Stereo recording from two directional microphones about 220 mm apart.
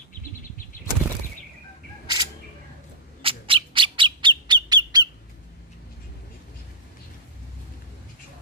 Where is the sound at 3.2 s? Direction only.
25° right (ahead or behind).